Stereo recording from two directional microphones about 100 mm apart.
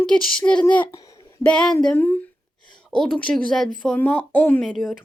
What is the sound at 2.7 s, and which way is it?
Speech, 5° left (ahead or behind).